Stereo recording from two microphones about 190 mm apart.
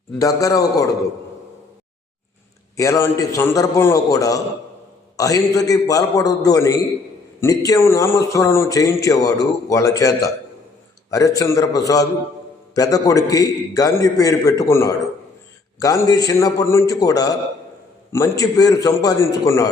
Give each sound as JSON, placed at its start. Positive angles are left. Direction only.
{"t": 0.2, "sound": "a man's voice", "side_deg": 15}
{"t": 2.7, "sound": "a man's voice", "side_deg": 15}